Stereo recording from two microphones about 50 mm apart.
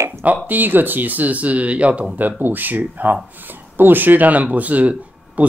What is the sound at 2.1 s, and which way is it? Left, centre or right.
Speech, right.